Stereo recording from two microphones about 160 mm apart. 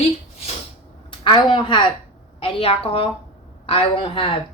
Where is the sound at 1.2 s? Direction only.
30° left (ahead or behind).